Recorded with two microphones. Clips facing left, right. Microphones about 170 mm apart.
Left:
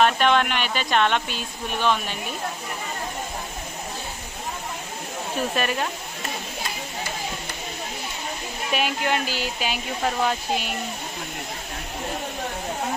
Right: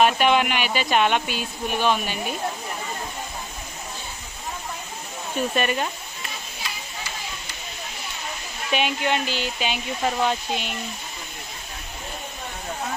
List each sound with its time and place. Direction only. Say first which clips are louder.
0.0 s speech: right 1 dB; 5° right (ahead or behind)
5.6 s speech: right 2 dB; centre (ahead or behind)
8.7 s speech: right 1 dB; centre (ahead or behind)